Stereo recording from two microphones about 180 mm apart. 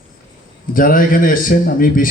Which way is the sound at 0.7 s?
50° left (ahead or behind).